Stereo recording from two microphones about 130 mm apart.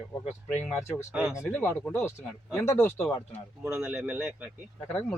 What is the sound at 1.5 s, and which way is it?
A man's voice, 15° left (ahead or behind).